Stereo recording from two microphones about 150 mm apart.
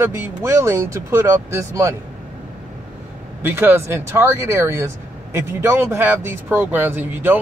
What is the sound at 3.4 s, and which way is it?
Speech, 15° right (ahead or behind).